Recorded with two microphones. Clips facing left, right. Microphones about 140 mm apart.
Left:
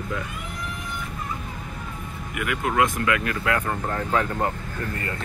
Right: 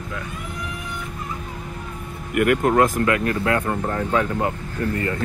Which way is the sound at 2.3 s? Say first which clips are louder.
Right 7 dB; 50° right (ahead or behind).